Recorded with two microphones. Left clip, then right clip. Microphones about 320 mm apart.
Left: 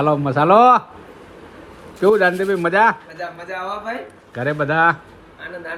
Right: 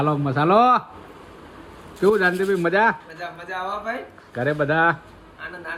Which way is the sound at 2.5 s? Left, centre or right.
Left.